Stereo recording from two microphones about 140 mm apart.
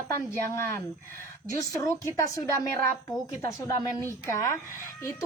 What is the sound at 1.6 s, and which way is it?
A woman's voice, 20° left (ahead or behind).